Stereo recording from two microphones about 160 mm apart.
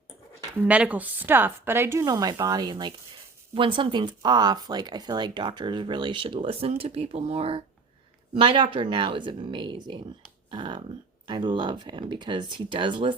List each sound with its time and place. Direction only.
0.6 s a woman's voice: 10° right (ahead or behind); by 13.1 s 30° right (ahead or behind)